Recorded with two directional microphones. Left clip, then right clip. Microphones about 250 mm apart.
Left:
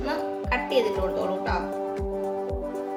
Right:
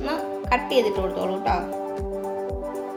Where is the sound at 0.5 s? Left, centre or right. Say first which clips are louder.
Right 3 dB; right.